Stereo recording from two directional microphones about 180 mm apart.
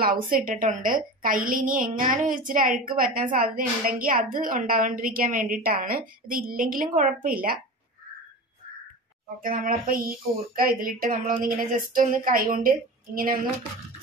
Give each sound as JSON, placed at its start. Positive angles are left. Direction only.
{"t": 0.0, "sound": "a woman's voice", "side_deg": -55}
{"t": 9.4, "sound": "a woman's voice", "side_deg": -50}